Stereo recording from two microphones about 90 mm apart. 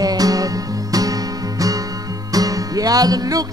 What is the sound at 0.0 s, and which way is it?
Music, 45° right (ahead or behind).